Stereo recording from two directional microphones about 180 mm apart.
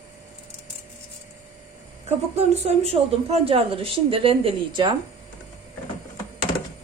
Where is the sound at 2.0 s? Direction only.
35° right (ahead or behind).